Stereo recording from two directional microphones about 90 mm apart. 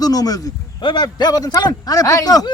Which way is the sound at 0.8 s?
55° left (ahead or behind).